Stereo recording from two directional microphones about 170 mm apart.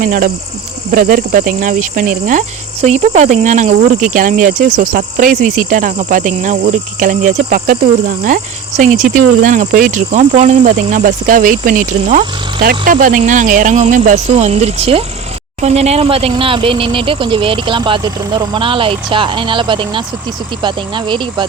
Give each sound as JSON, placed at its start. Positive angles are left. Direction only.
{"t": 0.0, "sound": "speech", "side_deg": -50}